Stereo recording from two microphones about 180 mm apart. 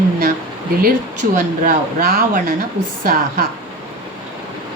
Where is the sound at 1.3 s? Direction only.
50° right (ahead or behind).